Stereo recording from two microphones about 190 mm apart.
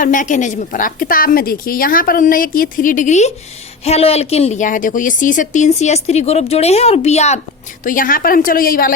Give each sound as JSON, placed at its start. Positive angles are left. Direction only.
{"t": 0.0, "sound": "a woman's voice", "side_deg": 45}
{"t": 7.9, "sound": "a woman's voice", "side_deg": 45}